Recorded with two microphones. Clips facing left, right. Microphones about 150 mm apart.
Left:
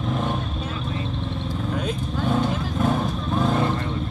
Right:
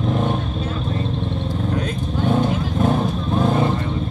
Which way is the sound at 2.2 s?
30° right (ahead or behind).